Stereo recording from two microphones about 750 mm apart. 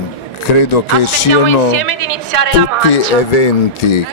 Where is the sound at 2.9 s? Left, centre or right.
Left.